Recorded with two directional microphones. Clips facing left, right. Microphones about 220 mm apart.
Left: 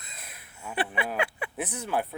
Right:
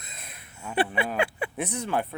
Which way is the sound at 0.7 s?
30° right (ahead or behind).